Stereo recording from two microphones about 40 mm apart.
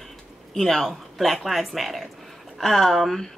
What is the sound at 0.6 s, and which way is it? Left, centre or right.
Speech, centre.